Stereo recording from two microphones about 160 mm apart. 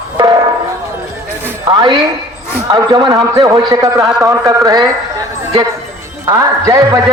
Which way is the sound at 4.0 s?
Centre (ahead or behind).